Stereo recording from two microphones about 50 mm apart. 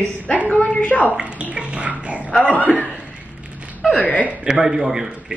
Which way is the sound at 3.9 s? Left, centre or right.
Left.